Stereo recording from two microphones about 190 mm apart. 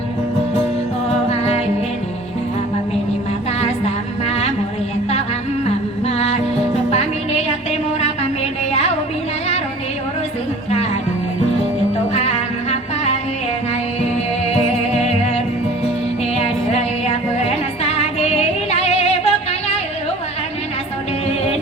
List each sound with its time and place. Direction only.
3.6 s music: 35° left (ahead or behind)
6.1 s music: 35° left (ahead or behind)
12.1 s music: 35° left (ahead or behind)
16.3 s music: 35° left (ahead or behind)